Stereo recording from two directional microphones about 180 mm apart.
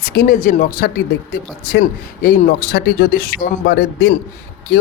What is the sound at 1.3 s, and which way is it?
Speech, 60° left (ahead or behind).